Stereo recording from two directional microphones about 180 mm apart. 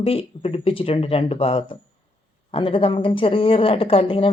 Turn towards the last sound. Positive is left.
turn(degrees=30)  # may be behind; listen again after turning